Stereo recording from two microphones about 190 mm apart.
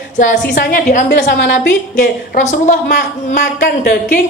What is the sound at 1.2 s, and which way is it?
Speech, 70° left (ahead or behind).